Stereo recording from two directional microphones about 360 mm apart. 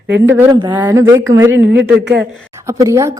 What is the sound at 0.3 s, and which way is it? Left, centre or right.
A woman's voice, centre.